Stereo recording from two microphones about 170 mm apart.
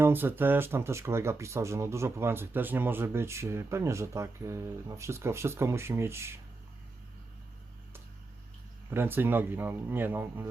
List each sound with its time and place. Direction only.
0.0 s speech: 10° right (ahead or behind)
8.9 s speech: 10° right (ahead or behind)